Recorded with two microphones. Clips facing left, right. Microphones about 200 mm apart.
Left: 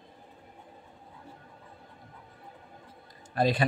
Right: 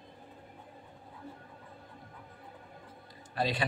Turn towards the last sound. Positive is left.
turn(degrees=50)  # may be behind; listen again after turning